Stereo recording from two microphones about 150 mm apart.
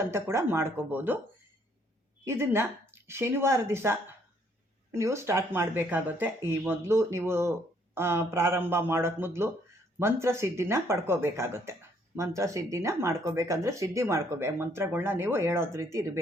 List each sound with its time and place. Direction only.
0.0 s speech: 15° right (ahead or behind)
2.2 s speech: 15° right (ahead or behind)